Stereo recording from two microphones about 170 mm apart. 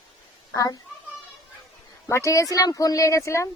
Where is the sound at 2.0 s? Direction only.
15° left (ahead or behind).